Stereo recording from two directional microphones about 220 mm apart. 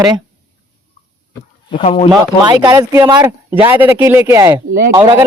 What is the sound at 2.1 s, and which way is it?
Speech, 20° right (ahead or behind).